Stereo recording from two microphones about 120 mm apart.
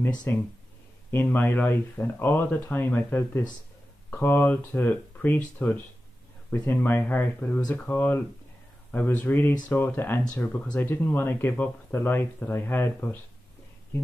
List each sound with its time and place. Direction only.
0.3 s speech: 20° left (ahead or behind)